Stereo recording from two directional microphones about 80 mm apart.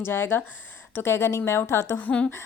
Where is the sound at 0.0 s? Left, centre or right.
Left.